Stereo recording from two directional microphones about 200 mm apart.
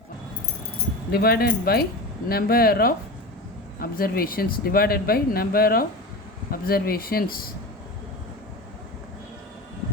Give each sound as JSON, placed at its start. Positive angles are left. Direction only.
{"t": 1.1, "sound": "speech", "side_deg": 50}